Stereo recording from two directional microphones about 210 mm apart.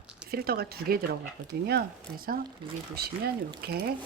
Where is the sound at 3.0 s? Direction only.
50° right (ahead or behind).